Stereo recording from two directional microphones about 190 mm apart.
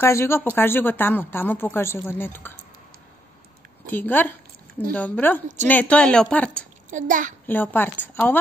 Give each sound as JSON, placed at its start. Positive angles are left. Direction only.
{"t": 0.0, "sound": "speech", "side_deg": 15}
{"t": 3.9, "sound": "speech", "side_deg": 10}
{"t": 6.9, "sound": "a child's voice", "side_deg": -45}
{"t": 7.4, "sound": "speech", "side_deg": 10}